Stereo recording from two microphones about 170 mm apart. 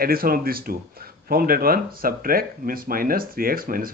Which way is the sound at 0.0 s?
60° right (ahead or behind).